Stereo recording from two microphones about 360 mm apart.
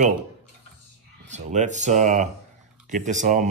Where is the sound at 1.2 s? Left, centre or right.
Centre.